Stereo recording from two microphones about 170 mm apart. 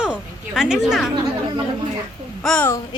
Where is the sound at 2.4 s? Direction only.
5° left (ahead or behind).